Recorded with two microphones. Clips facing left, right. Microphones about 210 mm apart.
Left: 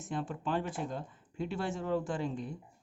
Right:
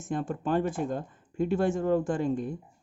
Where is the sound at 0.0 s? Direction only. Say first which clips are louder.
Right 6 dB; 50° right (ahead or behind).